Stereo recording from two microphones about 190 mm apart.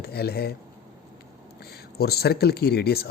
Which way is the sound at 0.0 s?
55° left (ahead or behind).